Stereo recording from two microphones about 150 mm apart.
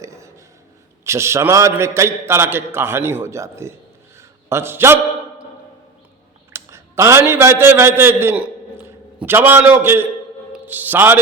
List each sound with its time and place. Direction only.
1.0 s a man's voice: 20° right (ahead or behind)
6.5 s a man's voice: 20° right (ahead or behind)